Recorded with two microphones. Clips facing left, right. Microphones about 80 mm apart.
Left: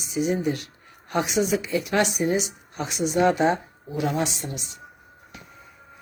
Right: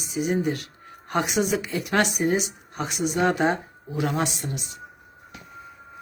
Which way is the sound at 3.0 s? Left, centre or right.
Right.